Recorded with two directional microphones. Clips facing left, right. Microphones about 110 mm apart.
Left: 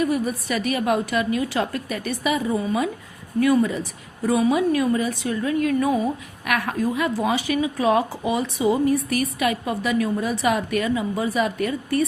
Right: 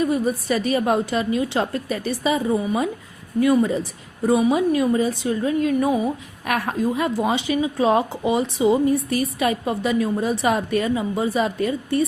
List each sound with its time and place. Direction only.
0.0 s a woman's voice: 30° right (ahead or behind)
4.3 s a woman's voice: 20° right (ahead or behind)